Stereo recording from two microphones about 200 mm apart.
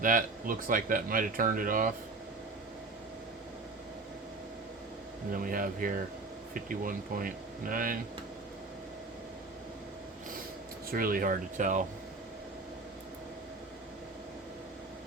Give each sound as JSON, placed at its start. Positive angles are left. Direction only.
{"t": 0.0, "sound": "speech", "side_deg": -40}
{"t": 5.3, "sound": "speech", "side_deg": -45}
{"t": 10.9, "sound": "speech", "side_deg": -45}